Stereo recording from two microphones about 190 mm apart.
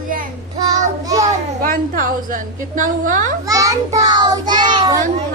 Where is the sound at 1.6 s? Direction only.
45° right (ahead or behind).